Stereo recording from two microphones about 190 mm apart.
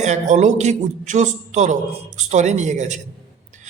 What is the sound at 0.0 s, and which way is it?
A man's voice, 40° right (ahead or behind).